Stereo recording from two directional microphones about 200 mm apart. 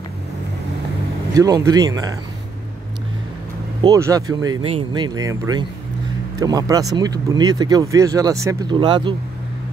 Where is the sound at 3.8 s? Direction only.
15° right (ahead or behind).